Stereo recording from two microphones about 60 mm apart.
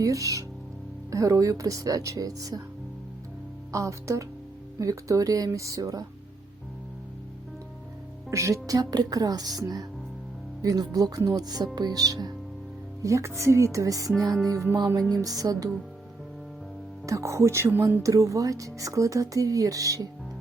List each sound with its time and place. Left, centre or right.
0.0 s speech: right
3.7 s speech: right
5.5 s speech: right
8.3 s speech: right
13.0 s speech: right
15.1 s speech: right
17.1 s speech: right
18.0 s speech: right